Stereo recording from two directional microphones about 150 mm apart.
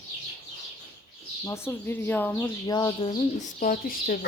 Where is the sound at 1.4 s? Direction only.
15° left (ahead or behind).